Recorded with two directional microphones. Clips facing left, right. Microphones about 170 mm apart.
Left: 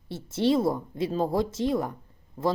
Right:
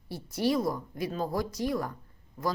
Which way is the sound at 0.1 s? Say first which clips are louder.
Left 4 dB; 25° left (ahead or behind).